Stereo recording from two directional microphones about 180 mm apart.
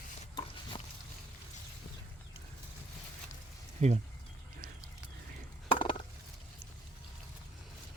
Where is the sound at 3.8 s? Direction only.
40° right (ahead or behind).